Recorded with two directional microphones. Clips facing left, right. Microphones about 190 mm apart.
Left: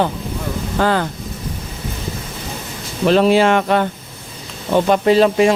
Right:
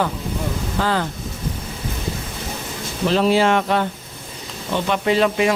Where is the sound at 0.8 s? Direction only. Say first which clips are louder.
Left 5 dB; 55° left (ahead or behind).